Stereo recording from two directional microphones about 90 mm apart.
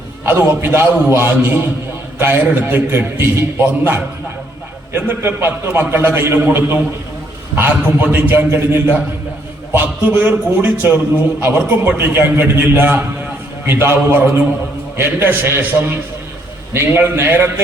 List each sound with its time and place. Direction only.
0.3 s a man's voice: 25° right (ahead or behind)